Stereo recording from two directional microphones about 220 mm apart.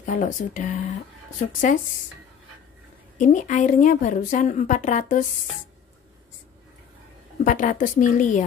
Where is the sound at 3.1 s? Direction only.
35° left (ahead or behind).